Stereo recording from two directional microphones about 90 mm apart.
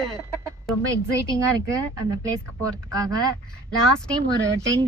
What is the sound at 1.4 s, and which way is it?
Speech, 35° right (ahead or behind).